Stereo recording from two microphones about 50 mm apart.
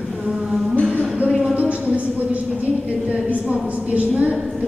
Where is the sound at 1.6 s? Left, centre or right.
Right.